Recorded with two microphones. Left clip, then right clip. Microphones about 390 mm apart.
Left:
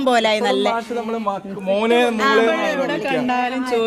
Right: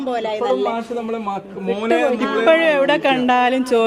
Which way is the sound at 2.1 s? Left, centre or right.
Left.